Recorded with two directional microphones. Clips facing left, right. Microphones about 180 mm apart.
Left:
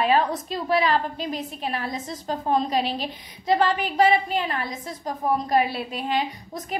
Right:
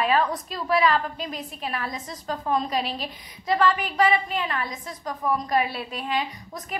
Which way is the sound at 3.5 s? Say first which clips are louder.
Left 1 dB; 30° left (ahead or behind).